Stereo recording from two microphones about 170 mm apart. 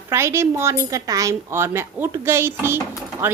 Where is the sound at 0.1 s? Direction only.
15° right (ahead or behind).